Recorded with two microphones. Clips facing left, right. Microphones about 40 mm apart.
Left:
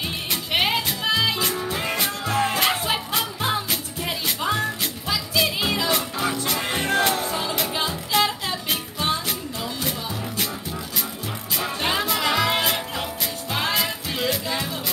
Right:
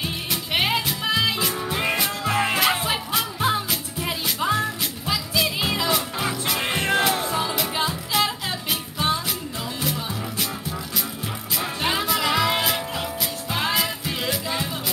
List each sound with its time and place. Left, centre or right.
0.3 s music: centre
1.5 s music: centre
2.9 s music: centre
6.7 s music: centre
7.8 s music: centre
11.8 s music: centre